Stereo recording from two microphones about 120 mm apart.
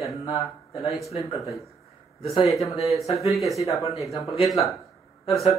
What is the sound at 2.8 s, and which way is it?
Speech, centre (ahead or behind).